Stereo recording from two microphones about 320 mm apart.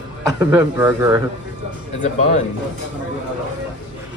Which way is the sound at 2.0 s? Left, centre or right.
Left.